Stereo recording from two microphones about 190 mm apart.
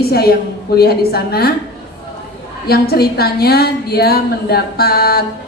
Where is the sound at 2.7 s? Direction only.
55° left (ahead or behind).